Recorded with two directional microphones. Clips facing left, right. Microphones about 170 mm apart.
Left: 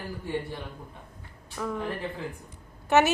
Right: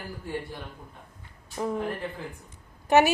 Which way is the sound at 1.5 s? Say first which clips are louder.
Right 3 dB; 25° right (ahead or behind).